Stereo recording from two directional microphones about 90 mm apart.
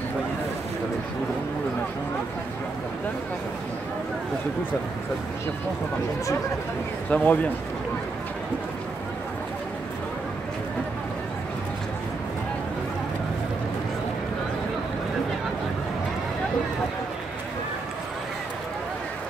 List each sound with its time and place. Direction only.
7.1 s speech: 15° left (ahead or behind)